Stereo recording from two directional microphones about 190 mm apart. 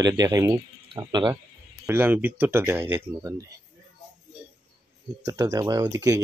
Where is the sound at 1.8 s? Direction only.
10° right (ahead or behind).